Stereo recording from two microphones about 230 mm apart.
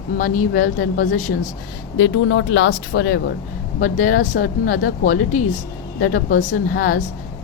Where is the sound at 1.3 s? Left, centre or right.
Left.